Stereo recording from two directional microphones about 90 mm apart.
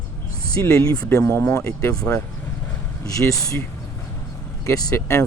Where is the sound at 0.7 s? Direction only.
35° left (ahead or behind).